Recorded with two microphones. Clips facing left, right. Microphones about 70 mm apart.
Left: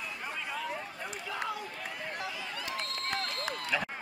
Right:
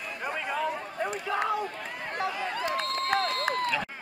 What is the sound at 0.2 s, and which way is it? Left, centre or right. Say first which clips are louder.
Run: right 9 dB; right.